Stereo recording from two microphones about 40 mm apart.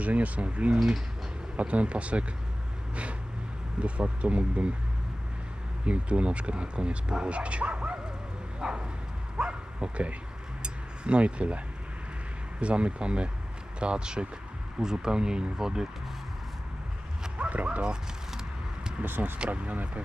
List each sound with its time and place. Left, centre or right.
0.0 s speech: right
2.9 s vehicle: right
3.8 s speech: right
5.8 s speech: right
8.5 s bow-wow: right
10.6 s a sound: right
12.5 s speech: right; by 15.9 s centre
17.3 s bow-wow: right
19.5 s speech: right